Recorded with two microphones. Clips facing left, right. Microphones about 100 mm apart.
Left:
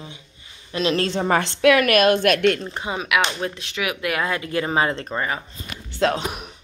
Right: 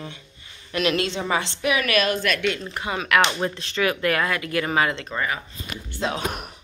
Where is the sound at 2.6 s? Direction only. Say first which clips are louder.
Left 1 dB; 20° left (ahead or behind).